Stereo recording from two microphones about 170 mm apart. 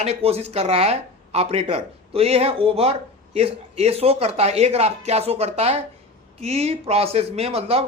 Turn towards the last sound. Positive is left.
turn(degrees=-35)  # may be behind; listen again after turning